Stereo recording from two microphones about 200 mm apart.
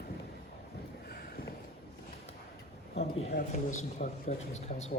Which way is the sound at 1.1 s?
50° left (ahead or behind).